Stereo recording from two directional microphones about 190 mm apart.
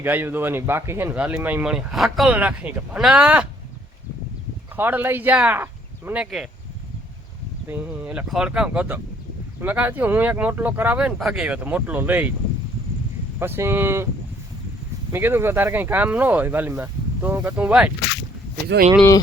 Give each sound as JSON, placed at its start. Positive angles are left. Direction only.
{"t": 0.0, "sound": "speech", "side_deg": -10}
{"t": 4.8, "sound": "speech", "side_deg": -10}
{"t": 7.7, "sound": "speech", "side_deg": -10}
{"t": 13.4, "sound": "speech", "side_deg": -10}
{"t": 15.1, "sound": "speech", "side_deg": -10}
{"t": 18.7, "sound": "speech", "side_deg": -65}